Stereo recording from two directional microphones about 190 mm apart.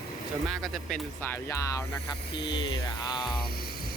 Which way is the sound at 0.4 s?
Centre (ahead or behind).